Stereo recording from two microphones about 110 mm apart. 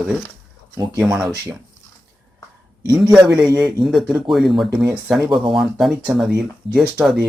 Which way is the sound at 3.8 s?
Centre (ahead or behind).